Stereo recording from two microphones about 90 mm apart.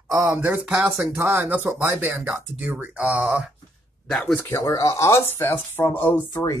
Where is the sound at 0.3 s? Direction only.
15° right (ahead or behind).